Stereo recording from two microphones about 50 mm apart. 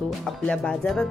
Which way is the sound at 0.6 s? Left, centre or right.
Centre.